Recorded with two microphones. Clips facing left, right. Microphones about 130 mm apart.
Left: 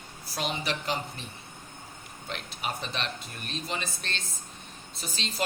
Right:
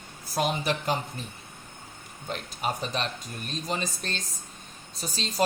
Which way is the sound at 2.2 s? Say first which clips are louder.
Right 4 dB; 40° right (ahead or behind).